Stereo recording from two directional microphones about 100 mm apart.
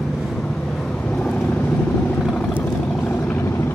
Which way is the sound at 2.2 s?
5° left (ahead or behind).